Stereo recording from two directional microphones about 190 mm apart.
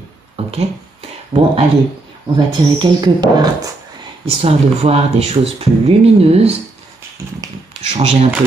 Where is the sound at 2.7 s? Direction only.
20° right (ahead or behind).